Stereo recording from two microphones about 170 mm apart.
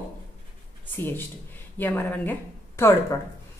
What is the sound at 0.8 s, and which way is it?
A woman's voice, 10° left (ahead or behind).